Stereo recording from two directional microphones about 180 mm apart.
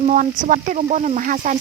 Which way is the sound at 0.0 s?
45° right (ahead or behind).